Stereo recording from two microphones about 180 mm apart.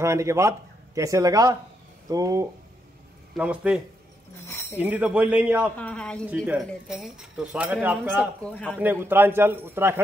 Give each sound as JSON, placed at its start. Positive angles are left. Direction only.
{"t": 0.0, "sound": "speech", "side_deg": -15}
{"t": 3.3, "sound": "speech", "side_deg": -5}
{"t": 4.5, "sound": "a sound", "side_deg": 15}
{"t": 4.7, "sound": "speech", "side_deg": -10}
{"t": 5.8, "sound": "speech", "side_deg": 5}
{"t": 6.3, "sound": "speech", "side_deg": -10}
{"t": 6.6, "sound": "speech", "side_deg": 0}
{"t": 8.2, "sound": "speech", "side_deg": 5}
{"t": 8.7, "sound": "speech", "side_deg": -10}